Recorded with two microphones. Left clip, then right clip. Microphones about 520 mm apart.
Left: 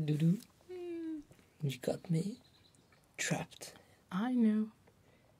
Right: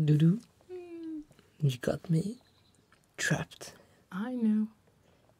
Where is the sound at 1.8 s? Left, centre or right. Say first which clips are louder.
Right 4 dB; right.